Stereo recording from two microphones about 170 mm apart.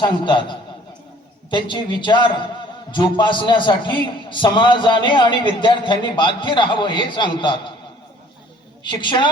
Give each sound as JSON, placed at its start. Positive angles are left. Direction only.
{"t": 0.0, "sound": "a man's voice", "side_deg": 30}
{"t": 8.8, "sound": "a man's voice", "side_deg": 30}